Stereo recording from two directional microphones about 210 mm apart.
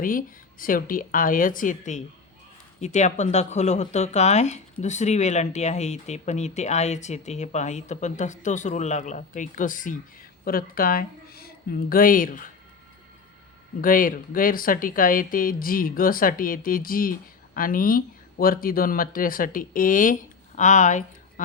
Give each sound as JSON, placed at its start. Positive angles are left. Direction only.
{"t": 0.0, "sound": "speech", "side_deg": 40}
{"t": 13.8, "sound": "speech", "side_deg": 40}